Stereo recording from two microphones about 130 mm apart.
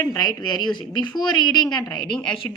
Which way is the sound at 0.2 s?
30° left (ahead or behind).